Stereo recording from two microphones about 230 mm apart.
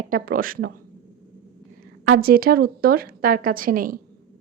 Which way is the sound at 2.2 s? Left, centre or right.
Right.